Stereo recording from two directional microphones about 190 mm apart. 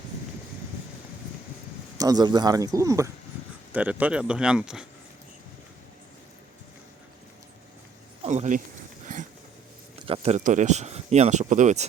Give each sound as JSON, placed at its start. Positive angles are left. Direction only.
{"t": 2.0, "sound": "speech", "side_deg": -20}
{"t": 8.2, "sound": "speech", "side_deg": -35}
{"t": 10.1, "sound": "speech", "side_deg": -35}